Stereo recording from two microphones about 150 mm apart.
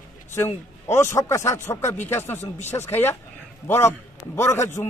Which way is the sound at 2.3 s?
50° left (ahead or behind).